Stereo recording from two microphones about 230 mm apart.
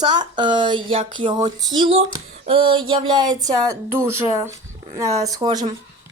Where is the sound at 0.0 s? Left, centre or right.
Centre.